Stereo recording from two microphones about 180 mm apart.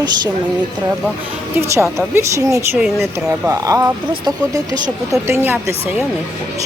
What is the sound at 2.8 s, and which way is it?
Speech, centre (ahead or behind).